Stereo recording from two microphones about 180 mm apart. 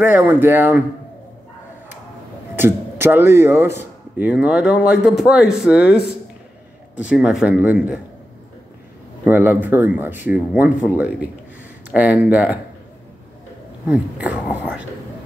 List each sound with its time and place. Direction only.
0.0 s speech: 10° right (ahead or behind)
2.5 s a man's voice: 10° right (ahead or behind)
7.0 s speech: 5° right (ahead or behind)
9.2 s speech: 10° right (ahead or behind)
13.8 s speech: 10° right (ahead or behind)